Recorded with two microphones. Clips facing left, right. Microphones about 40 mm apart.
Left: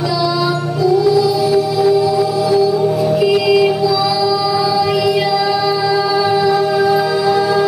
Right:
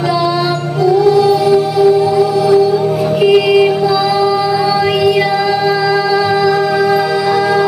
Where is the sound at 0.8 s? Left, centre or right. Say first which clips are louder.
Right 3 dB; right.